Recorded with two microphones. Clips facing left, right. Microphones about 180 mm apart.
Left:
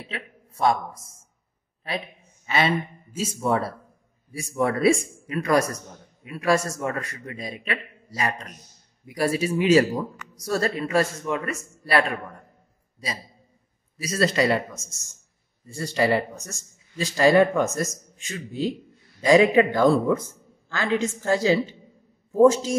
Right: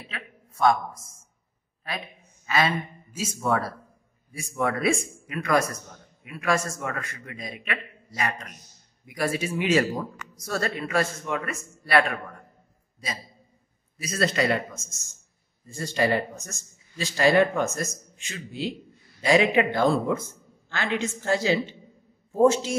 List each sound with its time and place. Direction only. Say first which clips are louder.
0.1 s a sound: left 4 dB; 30° left (ahead or behind)
2.4 s speech: left 2 dB; 25° left (ahead or behind)
14.0 s speech: left 3 dB; 35° left (ahead or behind)
15.8 s speech: left 2 dB; 35° left (ahead or behind)